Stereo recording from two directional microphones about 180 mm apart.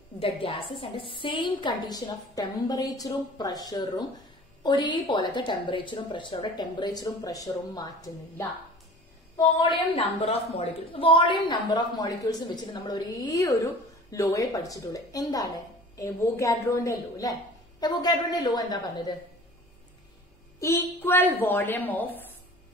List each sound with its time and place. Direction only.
0.2 s a woman's voice: 30° left (ahead or behind)
20.6 s a woman's voice: 15° left (ahead or behind)